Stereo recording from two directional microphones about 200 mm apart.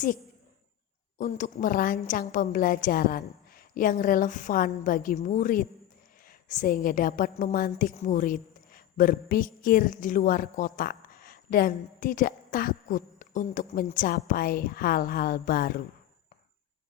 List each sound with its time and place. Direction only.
1.2 s a woman's voice: 35° left (ahead or behind)